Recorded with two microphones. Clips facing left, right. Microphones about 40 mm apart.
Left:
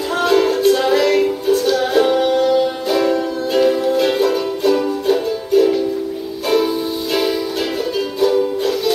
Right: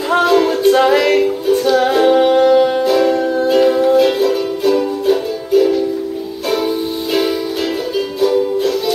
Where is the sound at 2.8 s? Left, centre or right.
Centre.